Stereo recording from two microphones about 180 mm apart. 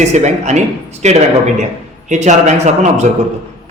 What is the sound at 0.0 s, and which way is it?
A man's voice, 40° right (ahead or behind).